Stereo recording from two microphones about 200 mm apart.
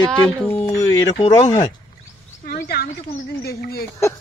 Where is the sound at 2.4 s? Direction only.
50° left (ahead or behind).